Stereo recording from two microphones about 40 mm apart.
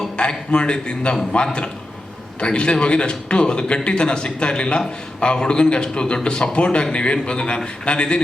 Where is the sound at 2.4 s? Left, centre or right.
Left.